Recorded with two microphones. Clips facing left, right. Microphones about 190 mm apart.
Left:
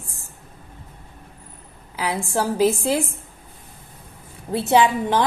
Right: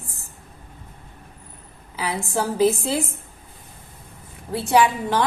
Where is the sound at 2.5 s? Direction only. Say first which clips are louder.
Right 1 dB; 15° left (ahead or behind).